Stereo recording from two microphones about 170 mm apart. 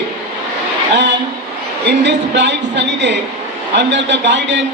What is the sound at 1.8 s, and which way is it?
Speech, 90° right.